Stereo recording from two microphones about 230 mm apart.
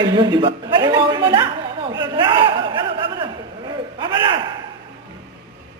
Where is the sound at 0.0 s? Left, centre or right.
Centre.